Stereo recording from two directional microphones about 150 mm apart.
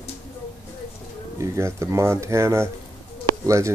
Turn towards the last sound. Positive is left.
turn(degrees=-20)  # may be behind; listen again after turning